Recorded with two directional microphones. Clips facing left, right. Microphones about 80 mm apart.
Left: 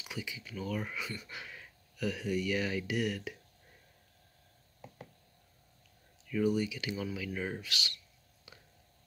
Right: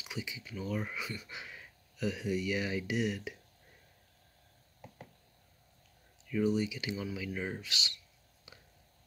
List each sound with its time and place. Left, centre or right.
0.0 s speech: centre
6.4 s speech: centre
8.5 s a sound: centre